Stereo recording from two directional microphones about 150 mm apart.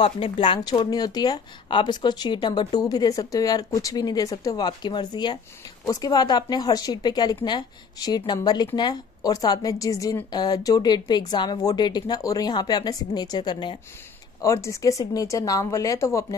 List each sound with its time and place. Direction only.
0.0 s speech: 35° left (ahead or behind)
14.4 s speech: 20° left (ahead or behind)